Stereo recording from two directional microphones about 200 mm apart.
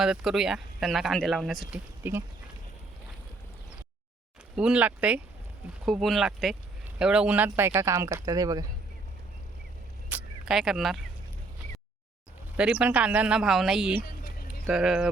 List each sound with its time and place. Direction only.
0.0 s speech: centre (ahead or behind)
4.5 s speech: 5° right (ahead or behind)
10.1 s a sound: 5° right (ahead or behind)
12.5 s speech: 5° right (ahead or behind)
14.1 s a sound: 45° left (ahead or behind)
14.7 s speech: centre (ahead or behind)